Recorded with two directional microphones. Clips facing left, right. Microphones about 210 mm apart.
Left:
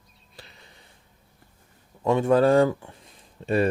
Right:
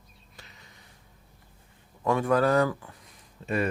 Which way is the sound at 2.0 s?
25° left (ahead or behind).